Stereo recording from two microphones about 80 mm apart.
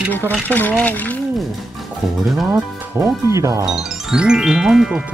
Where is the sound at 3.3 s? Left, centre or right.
Right.